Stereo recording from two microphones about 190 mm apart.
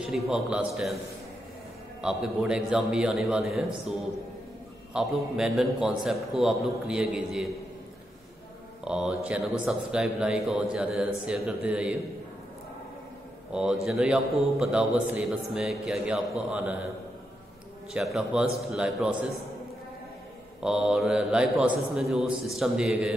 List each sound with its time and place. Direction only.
0.0 s a man's voice: centre (ahead or behind)
2.0 s a man's voice: 5° right (ahead or behind)
4.9 s a man's voice: centre (ahead or behind)
8.8 s a man's voice: 5° right (ahead or behind)
13.5 s a man's voice: 5° right (ahead or behind)
17.9 s a man's voice: 5° right (ahead or behind)
20.6 s a man's voice: 5° right (ahead or behind)